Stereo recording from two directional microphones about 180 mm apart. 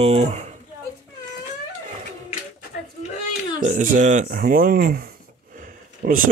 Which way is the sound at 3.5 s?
45° right (ahead or behind).